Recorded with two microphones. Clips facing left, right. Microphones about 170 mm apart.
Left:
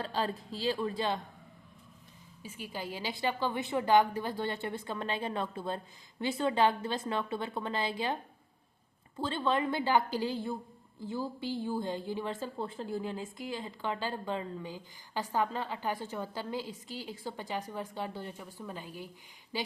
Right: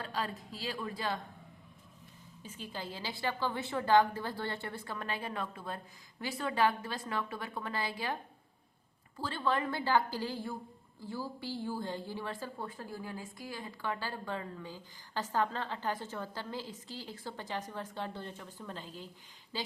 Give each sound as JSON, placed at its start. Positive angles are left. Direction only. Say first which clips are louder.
{"t": 0.0, "sound": "a woman's voice", "louder": "left 4 dB", "side_deg": 30}
{"t": 2.4, "sound": "a woman's voice", "louder": "left 2 dB", "side_deg": 10}